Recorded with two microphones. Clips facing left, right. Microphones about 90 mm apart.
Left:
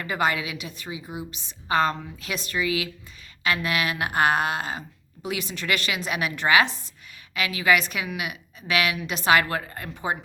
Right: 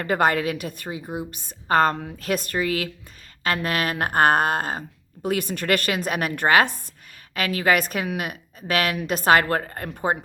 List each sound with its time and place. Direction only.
0.0 s a woman's voice: 50° right (ahead or behind)